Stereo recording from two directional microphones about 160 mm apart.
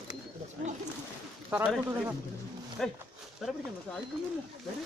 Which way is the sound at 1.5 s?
5° right (ahead or behind).